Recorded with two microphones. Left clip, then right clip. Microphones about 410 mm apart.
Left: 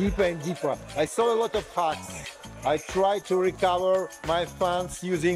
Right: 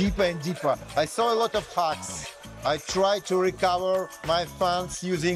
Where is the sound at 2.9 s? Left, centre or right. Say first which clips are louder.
Right 2 dB; centre.